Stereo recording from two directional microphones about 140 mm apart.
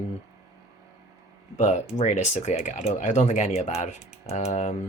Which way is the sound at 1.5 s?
55° left (ahead or behind).